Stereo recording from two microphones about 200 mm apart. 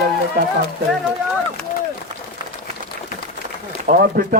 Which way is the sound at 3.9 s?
50° right (ahead or behind).